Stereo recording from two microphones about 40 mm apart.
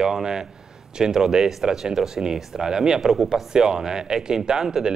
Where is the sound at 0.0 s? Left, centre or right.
Centre.